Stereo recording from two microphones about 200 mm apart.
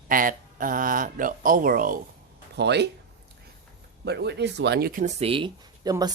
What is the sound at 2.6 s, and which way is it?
Speech, 55° right (ahead or behind).